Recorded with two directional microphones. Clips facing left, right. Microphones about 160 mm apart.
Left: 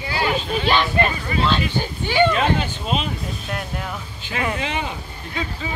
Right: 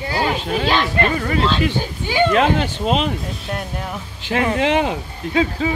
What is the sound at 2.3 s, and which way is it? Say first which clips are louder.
Speech: right 4 dB; 70° right (ahead or behind).